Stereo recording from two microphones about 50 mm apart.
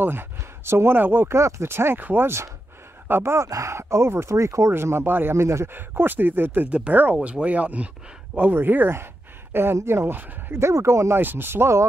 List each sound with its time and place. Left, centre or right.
0.0 s speech: right
0.9 s speech: right
2.2 s speech: right
4.7 s speech: right
5.7 s speech: right
6.7 s speech: right
8.4 s speech: right
10.5 s speech: right
11.1 s speech: right